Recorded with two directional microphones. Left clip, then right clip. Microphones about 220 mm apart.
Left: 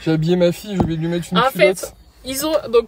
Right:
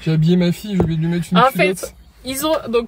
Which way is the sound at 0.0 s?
20° left (ahead or behind).